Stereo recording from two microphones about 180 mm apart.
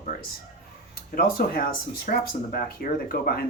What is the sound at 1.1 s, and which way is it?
Speech, 55° left (ahead or behind).